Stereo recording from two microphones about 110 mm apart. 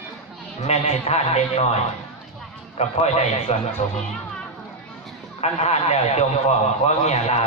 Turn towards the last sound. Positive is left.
turn(degrees=90)